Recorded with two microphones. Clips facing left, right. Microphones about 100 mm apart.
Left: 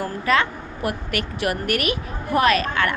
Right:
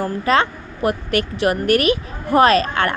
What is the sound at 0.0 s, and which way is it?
A woman's voice, 25° right (ahead or behind).